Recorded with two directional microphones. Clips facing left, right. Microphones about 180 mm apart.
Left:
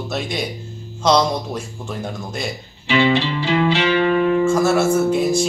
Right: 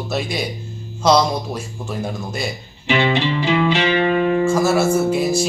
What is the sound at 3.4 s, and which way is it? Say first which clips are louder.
Music: even; 20° right (ahead or behind).